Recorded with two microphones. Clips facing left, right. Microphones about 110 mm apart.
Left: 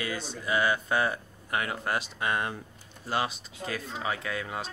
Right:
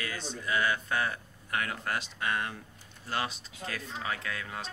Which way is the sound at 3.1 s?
10° left (ahead or behind).